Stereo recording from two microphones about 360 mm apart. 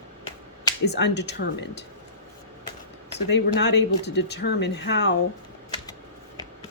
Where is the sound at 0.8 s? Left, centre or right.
Left.